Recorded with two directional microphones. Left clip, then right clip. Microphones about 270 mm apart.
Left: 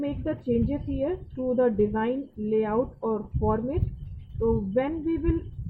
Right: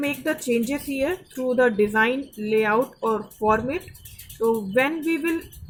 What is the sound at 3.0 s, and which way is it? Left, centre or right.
Speech, right.